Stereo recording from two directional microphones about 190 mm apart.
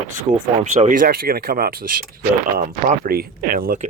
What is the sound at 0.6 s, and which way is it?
Speech, 35° right (ahead or behind).